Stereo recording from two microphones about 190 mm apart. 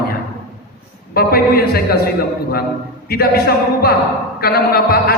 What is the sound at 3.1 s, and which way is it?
A man's voice, 55° left (ahead or behind).